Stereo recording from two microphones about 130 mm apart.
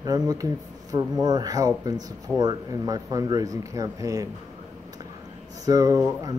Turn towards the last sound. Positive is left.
turn(degrees=-30)  # may be behind; listen again after turning